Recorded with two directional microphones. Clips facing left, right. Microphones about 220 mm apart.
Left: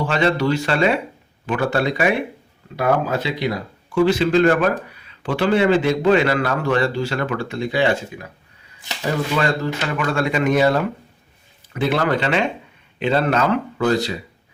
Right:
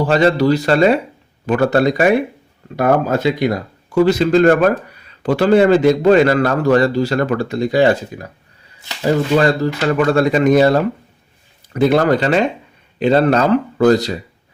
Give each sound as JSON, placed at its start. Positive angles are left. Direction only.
{"t": 0.0, "sound": "speech", "side_deg": -40}
{"t": 9.3, "sound": "speech", "side_deg": -35}